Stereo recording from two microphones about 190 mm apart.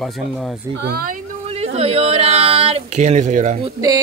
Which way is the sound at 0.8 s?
55° right (ahead or behind).